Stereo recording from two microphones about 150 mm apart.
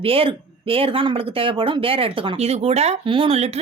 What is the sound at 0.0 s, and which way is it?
Speech, 40° right (ahead or behind).